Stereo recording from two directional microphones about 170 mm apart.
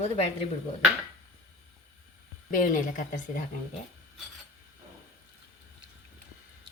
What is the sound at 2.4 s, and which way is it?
Speech, 50° left (ahead or behind).